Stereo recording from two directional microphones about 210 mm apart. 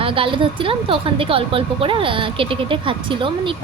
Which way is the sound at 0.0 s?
25° right (ahead or behind).